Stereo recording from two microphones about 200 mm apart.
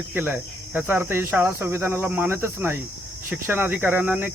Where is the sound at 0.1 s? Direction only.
10° right (ahead or behind).